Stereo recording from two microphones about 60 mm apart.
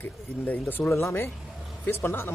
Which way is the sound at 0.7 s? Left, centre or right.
Left.